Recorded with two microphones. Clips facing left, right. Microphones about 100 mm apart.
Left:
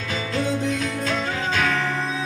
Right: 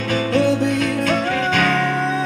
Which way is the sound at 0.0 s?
55° right (ahead or behind).